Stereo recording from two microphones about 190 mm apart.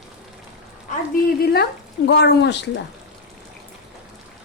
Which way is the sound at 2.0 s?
60° left (ahead or behind).